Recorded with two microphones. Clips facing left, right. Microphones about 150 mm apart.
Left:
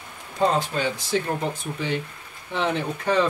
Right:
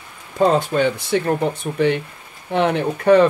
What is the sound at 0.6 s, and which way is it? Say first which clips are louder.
Speech: right 7 dB; 60° right (ahead or behind).